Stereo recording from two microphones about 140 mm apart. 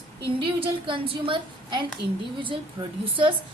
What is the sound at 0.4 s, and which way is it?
A woman's voice, 40° right (ahead or behind).